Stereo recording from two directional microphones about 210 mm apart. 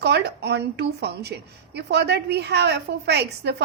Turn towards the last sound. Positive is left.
turn(degrees=-55)  # may be behind; listen again after turning